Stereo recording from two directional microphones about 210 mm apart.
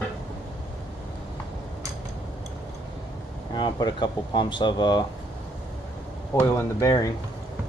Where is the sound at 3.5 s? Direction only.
20° left (ahead or behind).